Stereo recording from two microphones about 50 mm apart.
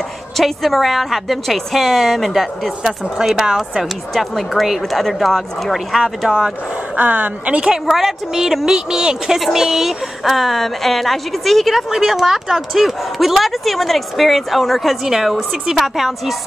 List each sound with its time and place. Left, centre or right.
0.4 s a woman's voice: centre
4.1 s a woman's voice: centre
5.9 s a woman's voice: centre
7.0 s speech: right
7.9 s a woman's voice: centre